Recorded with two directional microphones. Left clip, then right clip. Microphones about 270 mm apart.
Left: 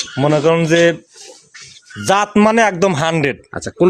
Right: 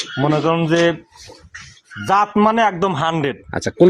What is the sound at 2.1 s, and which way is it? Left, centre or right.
Speech, left.